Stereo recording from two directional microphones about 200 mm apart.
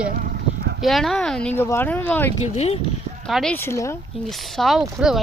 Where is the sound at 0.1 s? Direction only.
45° right (ahead or behind).